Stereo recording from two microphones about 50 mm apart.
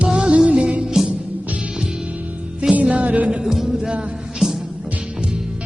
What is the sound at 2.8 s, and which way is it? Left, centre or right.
Music, right.